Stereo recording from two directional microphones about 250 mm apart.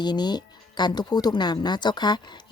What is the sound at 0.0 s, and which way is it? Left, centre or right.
Speech, centre.